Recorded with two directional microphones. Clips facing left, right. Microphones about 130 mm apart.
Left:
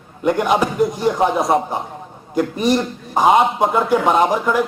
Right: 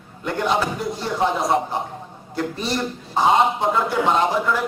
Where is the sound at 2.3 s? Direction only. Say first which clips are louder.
Left 7 dB; 15° left (ahead or behind).